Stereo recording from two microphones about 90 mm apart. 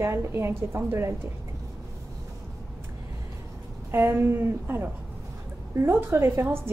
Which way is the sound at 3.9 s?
25° right (ahead or behind).